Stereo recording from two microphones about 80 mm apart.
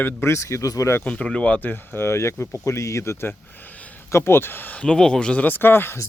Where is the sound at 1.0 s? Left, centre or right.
Centre.